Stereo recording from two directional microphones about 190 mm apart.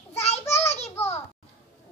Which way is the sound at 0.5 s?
35° left (ahead or behind).